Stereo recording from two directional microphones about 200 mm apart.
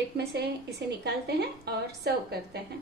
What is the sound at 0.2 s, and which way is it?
A woman's voice, 55° right (ahead or behind).